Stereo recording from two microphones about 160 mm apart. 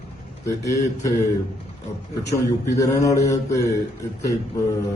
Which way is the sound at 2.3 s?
20° left (ahead or behind).